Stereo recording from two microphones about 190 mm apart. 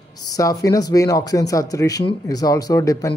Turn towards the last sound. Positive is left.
turn(degrees=15)  # may be behind; listen again after turning